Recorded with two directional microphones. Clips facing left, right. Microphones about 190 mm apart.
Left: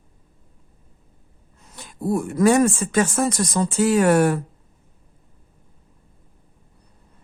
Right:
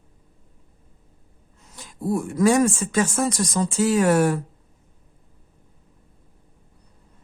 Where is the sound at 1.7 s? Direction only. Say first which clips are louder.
Left 2 dB; 60° left (ahead or behind).